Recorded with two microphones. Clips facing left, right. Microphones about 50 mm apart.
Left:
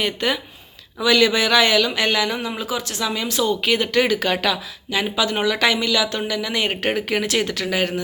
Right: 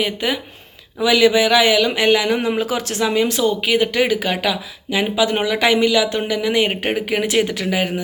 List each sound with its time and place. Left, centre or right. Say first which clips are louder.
0.0 s speech: right 1 dB; centre
2.4 s speech: right 6 dB; right
3.4 s speech: right 3 dB; centre